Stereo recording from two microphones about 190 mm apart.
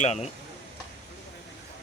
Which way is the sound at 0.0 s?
35° left (ahead or behind).